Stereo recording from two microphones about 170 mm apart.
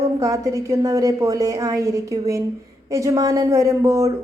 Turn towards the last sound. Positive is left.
turn(degrees=-20)  # may be behind; listen again after turning